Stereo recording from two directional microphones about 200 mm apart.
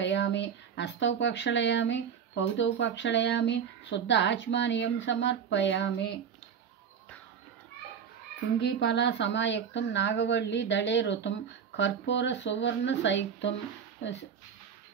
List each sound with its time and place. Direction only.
0.0 s speech: 60° left (ahead or behind)
8.5 s speech: 60° left (ahead or behind)